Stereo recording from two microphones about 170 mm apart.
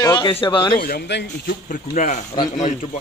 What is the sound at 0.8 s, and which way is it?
Speech, 75° left (ahead or behind).